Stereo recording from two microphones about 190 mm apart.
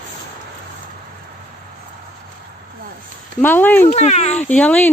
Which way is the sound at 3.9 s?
35° left (ahead or behind).